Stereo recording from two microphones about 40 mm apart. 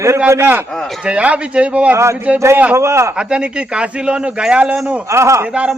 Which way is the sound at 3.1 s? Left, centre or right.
Right.